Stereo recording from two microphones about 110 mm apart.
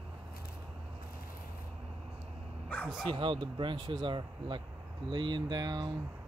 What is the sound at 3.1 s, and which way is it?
Speech, 50° right (ahead or behind).